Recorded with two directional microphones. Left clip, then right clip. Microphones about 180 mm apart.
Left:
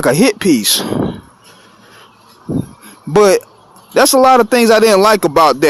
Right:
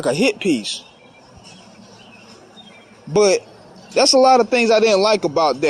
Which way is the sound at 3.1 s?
40° left (ahead or behind).